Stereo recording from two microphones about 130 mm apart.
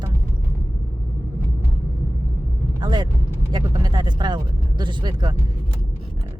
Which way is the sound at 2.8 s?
35° right (ahead or behind).